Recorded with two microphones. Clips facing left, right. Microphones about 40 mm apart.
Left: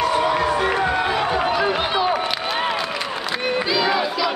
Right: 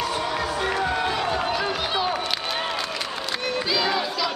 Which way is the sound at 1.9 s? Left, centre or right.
Centre.